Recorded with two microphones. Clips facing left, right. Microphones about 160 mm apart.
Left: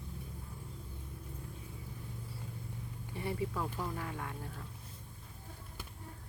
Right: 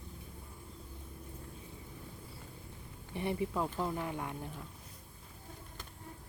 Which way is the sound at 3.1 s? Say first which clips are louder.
Right 3 dB; 20° right (ahead or behind).